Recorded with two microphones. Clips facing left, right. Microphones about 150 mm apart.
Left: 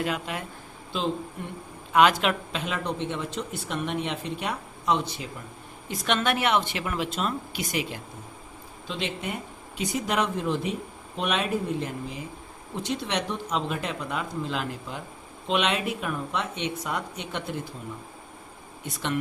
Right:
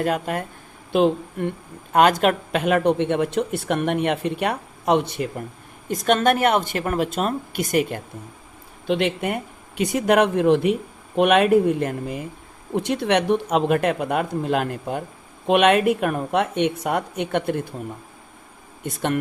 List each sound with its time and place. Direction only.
0.0 s speech: 50° right (ahead or behind)
0.9 s speech: 60° right (ahead or behind)
1.9 s speech: 45° right (ahead or behind)
5.9 s speech: 45° right (ahead or behind)
8.9 s speech: 60° right (ahead or behind)
18.8 s speech: 50° right (ahead or behind)